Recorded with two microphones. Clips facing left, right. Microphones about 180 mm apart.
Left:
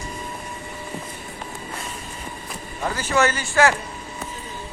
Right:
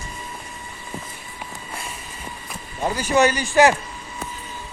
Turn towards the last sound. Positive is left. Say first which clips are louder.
# right 3 dB
turn(degrees=-15)  # may be behind; listen again after turning